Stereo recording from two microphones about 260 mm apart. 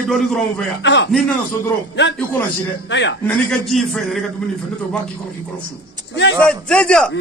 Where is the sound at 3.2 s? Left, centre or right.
Centre.